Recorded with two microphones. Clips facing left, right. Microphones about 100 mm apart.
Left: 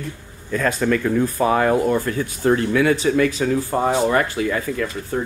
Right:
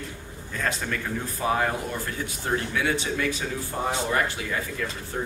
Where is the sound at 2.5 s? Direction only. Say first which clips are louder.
Left 8 dB; 75° left (ahead or behind).